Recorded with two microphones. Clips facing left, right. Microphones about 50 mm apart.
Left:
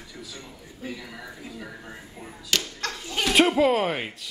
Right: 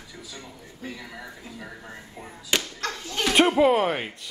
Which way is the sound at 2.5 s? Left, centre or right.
Right.